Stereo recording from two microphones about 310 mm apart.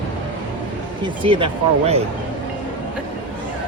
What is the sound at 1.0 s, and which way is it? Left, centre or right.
Speech, centre.